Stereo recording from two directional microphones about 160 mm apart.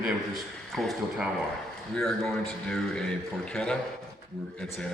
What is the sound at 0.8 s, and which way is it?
Speech, centre (ahead or behind).